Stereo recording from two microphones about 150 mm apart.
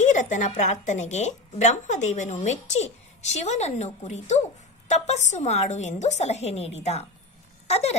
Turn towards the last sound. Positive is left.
turn(degrees=45)  # may be behind; listen again after turning